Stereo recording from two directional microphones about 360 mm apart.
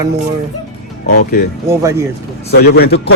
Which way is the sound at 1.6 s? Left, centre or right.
Centre.